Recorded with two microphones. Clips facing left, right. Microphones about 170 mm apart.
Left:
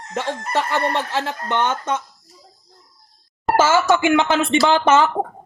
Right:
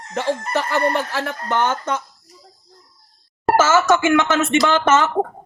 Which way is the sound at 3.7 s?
15° left (ahead or behind).